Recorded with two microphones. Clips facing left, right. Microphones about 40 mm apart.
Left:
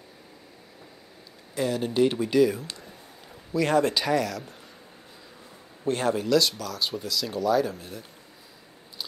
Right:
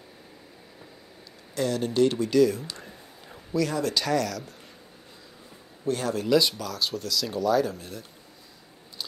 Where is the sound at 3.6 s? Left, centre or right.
Left.